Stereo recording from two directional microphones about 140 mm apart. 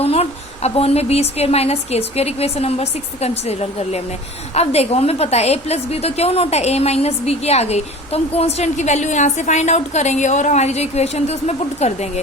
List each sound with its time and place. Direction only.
0.0 s a woman's voice: 45° left (ahead or behind)